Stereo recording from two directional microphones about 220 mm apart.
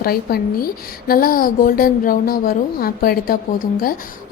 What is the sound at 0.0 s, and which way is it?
A woman's voice, 45° left (ahead or behind).